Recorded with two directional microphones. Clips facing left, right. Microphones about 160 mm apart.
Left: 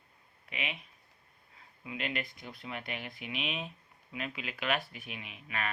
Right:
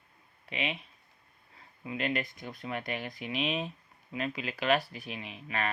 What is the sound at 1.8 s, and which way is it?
Speech, 40° right (ahead or behind).